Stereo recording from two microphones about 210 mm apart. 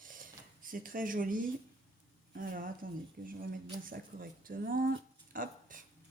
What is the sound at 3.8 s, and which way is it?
Speech, 40° right (ahead or behind).